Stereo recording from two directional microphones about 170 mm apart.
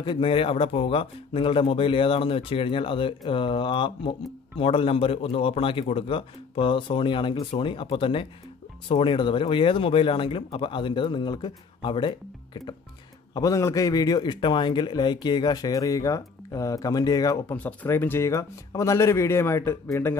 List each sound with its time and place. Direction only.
0.0 s speech: 30° left (ahead or behind)
13.3 s a man's voice: 20° left (ahead or behind)